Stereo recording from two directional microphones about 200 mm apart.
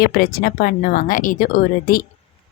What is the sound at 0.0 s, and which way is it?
A woman's voice, 50° left (ahead or behind).